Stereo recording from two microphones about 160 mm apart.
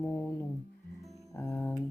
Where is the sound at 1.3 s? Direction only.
15° left (ahead or behind).